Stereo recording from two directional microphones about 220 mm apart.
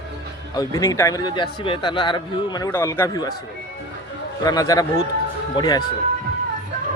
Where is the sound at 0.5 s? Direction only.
15° left (ahead or behind).